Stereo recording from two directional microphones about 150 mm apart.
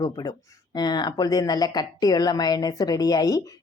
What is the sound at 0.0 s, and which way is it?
Speech, 25° left (ahead or behind).